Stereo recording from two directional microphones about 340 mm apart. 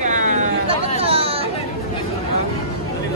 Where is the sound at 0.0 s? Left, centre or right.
Right.